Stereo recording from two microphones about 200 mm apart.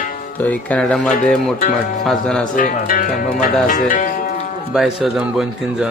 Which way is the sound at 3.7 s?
40° left (ahead or behind).